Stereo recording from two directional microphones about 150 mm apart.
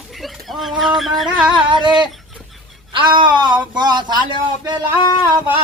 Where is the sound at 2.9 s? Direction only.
30° right (ahead or behind).